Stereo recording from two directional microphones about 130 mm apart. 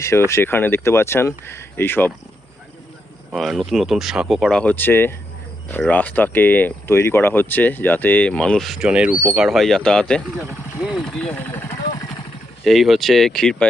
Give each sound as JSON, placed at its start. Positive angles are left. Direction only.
{"t": 0.3, "sound": "speech", "side_deg": 20}
{"t": 3.3, "sound": "speech", "side_deg": 0}
{"t": 10.3, "sound": "speech", "side_deg": -10}
{"t": 11.0, "sound": "speech", "side_deg": 5}
{"t": 12.6, "sound": "speech", "side_deg": 0}